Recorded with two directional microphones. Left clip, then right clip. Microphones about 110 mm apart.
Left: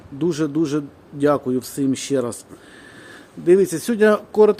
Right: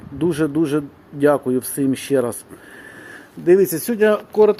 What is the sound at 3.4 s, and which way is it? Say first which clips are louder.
Speech: right 1 dB; 15° left (ahead or behind).